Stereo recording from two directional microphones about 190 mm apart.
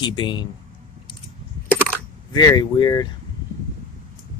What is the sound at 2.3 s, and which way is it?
Speech, 20° left (ahead or behind).